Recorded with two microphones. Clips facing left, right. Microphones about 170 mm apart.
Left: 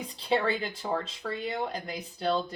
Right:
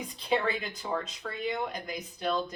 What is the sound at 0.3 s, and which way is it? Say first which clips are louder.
Speech: left 2 dB; 30° left (ahead or behind).